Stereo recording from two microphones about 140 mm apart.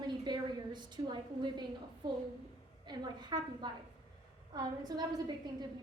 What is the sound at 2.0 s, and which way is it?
A woman's voice, 30° right (ahead or behind).